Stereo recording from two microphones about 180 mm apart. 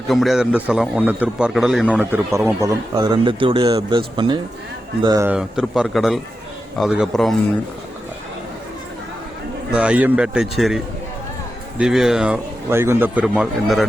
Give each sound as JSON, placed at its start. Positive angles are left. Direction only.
{"t": 0.1, "sound": "a man's voice", "side_deg": 0}
{"t": 5.3, "sound": "speech", "side_deg": -5}
{"t": 9.7, "sound": "a man's voice", "side_deg": -5}